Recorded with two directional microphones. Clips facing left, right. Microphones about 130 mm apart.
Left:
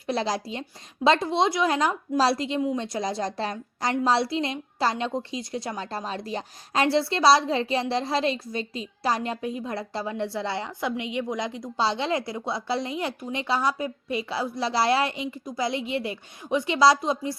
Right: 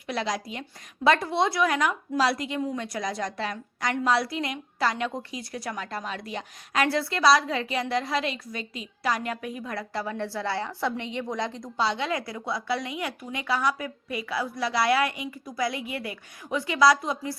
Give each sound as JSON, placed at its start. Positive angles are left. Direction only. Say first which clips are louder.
{"t": 0.1, "sound": "a woman's voice", "louder": "left 3 dB", "side_deg": 30}
{"t": 11.8, "sound": "a woman's voice", "louder": "left 2 dB", "side_deg": 30}